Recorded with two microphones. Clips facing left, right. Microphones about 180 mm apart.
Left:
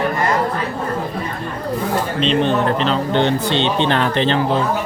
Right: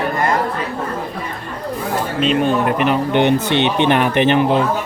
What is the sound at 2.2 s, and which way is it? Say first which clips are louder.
Speech: right 1 dB; 5° right (ahead or behind).